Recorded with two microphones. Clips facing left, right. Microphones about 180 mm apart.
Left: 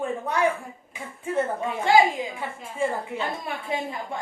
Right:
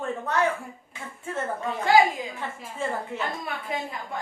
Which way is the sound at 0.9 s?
15° left (ahead or behind).